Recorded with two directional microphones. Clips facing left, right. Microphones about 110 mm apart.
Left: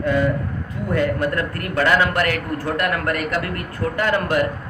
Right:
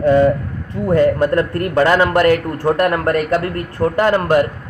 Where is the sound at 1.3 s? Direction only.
30° right (ahead or behind).